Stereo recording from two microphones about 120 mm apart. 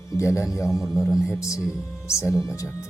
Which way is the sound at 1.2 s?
25° left (ahead or behind).